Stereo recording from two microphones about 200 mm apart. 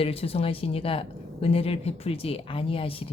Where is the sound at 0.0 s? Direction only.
30° left (ahead or behind).